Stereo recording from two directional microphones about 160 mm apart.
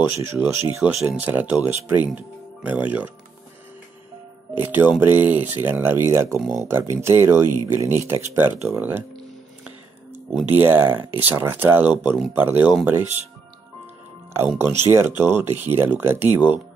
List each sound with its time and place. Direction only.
0.0 s speech: 15° right (ahead or behind)
4.6 s speech: 10° right (ahead or behind)
10.3 s speech: 10° right (ahead or behind)
14.6 s speech: 15° right (ahead or behind)